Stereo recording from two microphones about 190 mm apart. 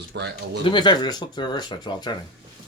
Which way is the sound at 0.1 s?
65° right (ahead or behind).